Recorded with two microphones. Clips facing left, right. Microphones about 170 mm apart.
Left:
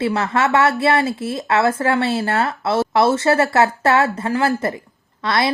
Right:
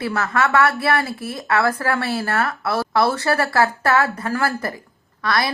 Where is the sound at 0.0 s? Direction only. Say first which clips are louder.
Left 3 dB; 25° left (ahead or behind).